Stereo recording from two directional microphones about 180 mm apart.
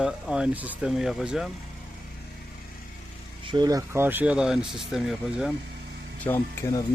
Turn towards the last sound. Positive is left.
turn(degrees=15)  # may be behind; listen again after turning